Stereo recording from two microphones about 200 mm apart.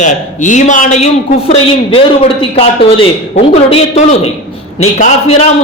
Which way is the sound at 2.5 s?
30° left (ahead or behind).